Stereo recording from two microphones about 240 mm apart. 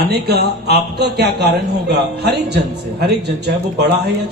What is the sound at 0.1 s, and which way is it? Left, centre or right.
A man's voice, right.